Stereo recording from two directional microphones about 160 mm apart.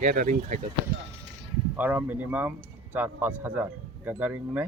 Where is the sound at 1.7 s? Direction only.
10° right (ahead or behind).